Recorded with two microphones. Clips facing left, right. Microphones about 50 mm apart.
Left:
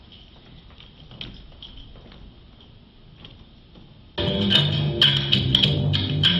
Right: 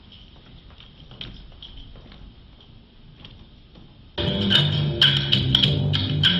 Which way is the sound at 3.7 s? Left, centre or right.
Centre.